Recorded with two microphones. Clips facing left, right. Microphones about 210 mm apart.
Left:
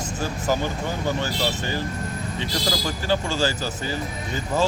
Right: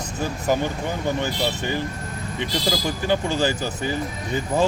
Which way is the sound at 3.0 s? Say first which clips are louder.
Right 2 dB; 20° right (ahead or behind).